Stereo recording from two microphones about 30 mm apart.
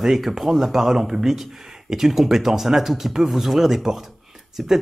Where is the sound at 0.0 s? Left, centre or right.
Centre.